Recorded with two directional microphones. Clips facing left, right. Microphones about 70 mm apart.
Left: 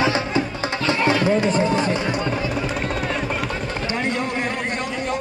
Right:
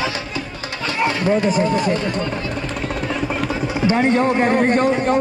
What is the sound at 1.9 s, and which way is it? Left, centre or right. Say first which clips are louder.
Speech: right 1 dB; centre.